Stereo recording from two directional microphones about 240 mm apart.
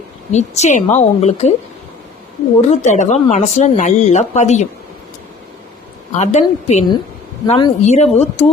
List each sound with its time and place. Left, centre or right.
0.3 s speech: left
2.6 s speech: left
6.1 s speech: left